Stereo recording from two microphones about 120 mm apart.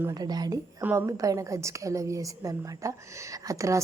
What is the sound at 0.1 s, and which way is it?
Speech, 35° right (ahead or behind).